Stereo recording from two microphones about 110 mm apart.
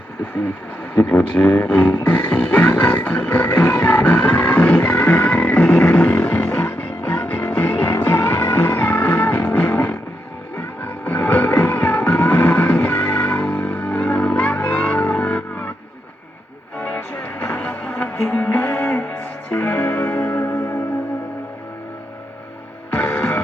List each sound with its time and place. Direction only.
0.9 s speech: 10° left (ahead or behind)
2.0 s music: 10° left (ahead or behind)
16.7 s music: 15° left (ahead or behind)
23.0 s music: 15° left (ahead or behind)